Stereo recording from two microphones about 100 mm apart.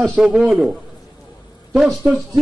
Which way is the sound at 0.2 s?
15° right (ahead or behind).